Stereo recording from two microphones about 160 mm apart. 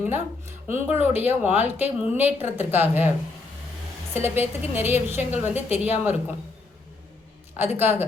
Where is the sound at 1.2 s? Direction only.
10° right (ahead or behind).